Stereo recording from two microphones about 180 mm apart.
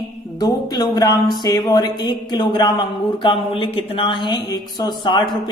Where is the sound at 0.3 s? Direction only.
20° left (ahead or behind).